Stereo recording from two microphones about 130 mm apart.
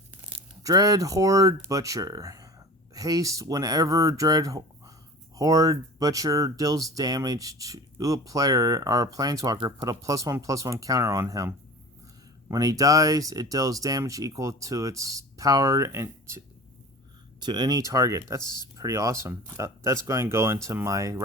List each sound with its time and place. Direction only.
0.6 s speech: 30° right (ahead or behind)
17.4 s speech: 30° right (ahead or behind)